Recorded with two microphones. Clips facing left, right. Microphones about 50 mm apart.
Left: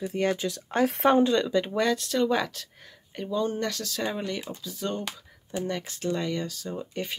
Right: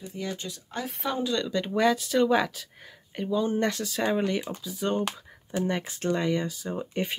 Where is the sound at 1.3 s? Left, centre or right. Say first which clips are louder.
Left 4 dB; centre.